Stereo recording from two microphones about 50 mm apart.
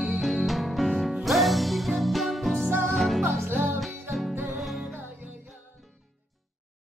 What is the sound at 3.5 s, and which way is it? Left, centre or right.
Music, right.